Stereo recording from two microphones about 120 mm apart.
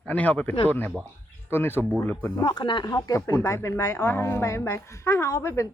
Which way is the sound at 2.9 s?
25° left (ahead or behind).